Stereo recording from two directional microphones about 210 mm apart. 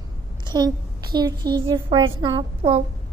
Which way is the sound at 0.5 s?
20° right (ahead or behind).